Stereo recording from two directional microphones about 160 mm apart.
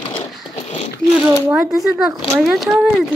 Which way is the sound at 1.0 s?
5° left (ahead or behind).